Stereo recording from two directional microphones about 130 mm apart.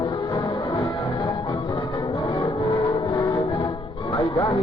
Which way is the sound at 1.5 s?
45° left (ahead or behind).